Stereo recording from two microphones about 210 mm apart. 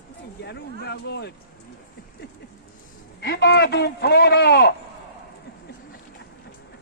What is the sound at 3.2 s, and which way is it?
A man's voice, 50° left (ahead or behind).